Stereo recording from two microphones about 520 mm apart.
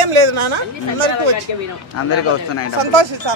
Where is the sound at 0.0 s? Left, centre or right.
Right.